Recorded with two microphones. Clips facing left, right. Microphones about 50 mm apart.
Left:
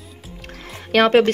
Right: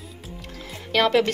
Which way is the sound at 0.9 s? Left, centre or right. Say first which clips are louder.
Left 5 dB; left.